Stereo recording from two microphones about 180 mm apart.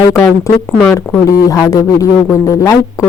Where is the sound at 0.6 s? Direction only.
5° right (ahead or behind).